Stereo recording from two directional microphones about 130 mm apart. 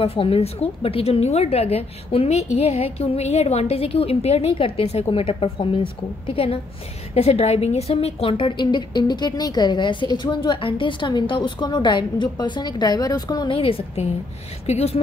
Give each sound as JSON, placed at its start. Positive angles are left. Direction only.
{"t": 0.0, "sound": "a woman's voice", "side_deg": 45}